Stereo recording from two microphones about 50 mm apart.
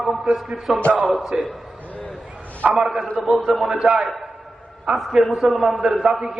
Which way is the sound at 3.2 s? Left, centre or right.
Centre.